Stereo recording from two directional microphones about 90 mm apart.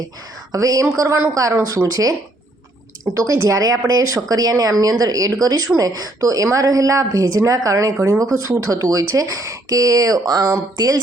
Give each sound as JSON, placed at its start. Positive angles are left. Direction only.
{"t": 0.5, "sound": "speech", "side_deg": -40}